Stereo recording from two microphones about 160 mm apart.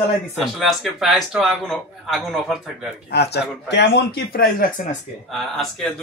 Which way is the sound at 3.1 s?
90° left.